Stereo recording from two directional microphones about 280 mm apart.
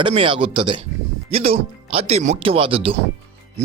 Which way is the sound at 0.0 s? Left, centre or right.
Centre.